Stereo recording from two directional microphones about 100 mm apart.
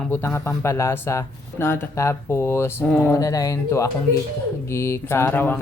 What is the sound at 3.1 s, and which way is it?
Speech, 35° left (ahead or behind).